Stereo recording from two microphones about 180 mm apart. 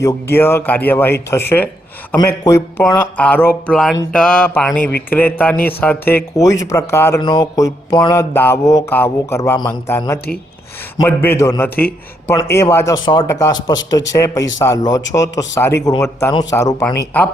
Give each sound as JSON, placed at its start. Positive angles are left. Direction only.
{"t": 0.0, "sound": "speech", "side_deg": 15}
{"t": 3.7, "sound": "mantra", "side_deg": 0}
{"t": 4.1, "sound": "speech", "side_deg": 5}
{"t": 7.2, "sound": "mantra", "side_deg": 25}
{"t": 10.0, "sound": "speech", "side_deg": 15}
{"t": 12.5, "sound": "mantra", "side_deg": 15}
{"t": 14.1, "sound": "speech", "side_deg": 15}
{"t": 14.6, "sound": "mantra", "side_deg": 20}
{"t": 16.0, "sound": "speech", "side_deg": 15}
{"t": 16.3, "sound": "mantra", "side_deg": 20}
{"t": 16.9, "sound": "speech", "side_deg": 15}